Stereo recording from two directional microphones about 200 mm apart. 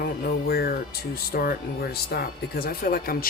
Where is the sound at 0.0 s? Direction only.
50° left (ahead or behind).